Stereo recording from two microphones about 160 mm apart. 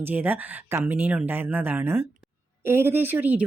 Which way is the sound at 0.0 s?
10° right (ahead or behind).